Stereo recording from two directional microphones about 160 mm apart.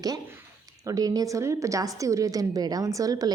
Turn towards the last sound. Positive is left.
turn(degrees=-20)  # may be behind; listen again after turning